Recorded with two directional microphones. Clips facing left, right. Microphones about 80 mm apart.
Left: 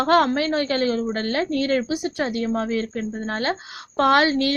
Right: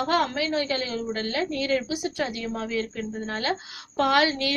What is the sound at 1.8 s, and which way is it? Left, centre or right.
Speech, left.